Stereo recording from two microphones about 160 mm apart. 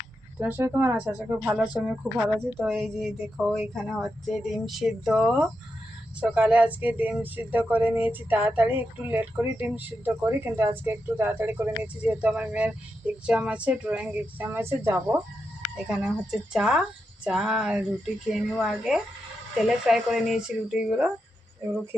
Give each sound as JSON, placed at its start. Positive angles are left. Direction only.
{"t": 0.3, "sound": "speech", "side_deg": -10}
{"t": 15.7, "sound": "speech", "side_deg": -5}